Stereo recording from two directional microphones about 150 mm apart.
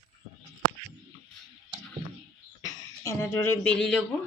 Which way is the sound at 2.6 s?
20° left (ahead or behind).